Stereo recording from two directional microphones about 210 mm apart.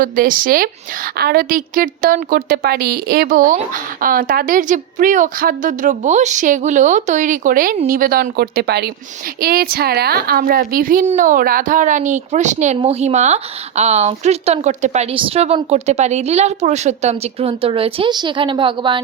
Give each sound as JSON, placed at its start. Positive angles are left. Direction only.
{"t": 0.0, "sound": "a woman's voice", "side_deg": -40}